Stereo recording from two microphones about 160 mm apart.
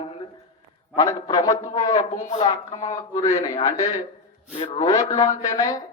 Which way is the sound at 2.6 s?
45° left (ahead or behind).